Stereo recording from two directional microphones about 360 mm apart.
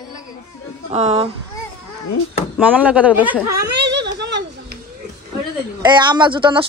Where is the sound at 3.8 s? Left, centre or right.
Right.